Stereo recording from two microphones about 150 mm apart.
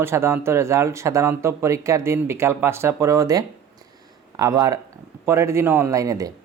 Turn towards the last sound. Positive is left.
turn(degrees=-20)  # may be behind; listen again after turning